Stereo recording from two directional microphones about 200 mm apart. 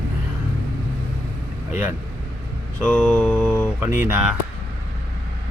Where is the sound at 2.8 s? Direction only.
5° left (ahead or behind).